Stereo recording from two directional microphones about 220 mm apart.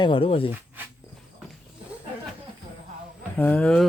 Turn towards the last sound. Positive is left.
turn(degrees=5)  # may be behind; listen again after turning